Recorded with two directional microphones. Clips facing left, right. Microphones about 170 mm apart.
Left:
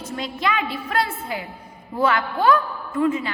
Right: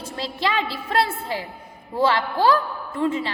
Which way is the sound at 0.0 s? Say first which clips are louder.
Even; 30° right (ahead or behind).